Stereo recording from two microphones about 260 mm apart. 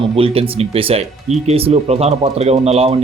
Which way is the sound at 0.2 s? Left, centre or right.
Right.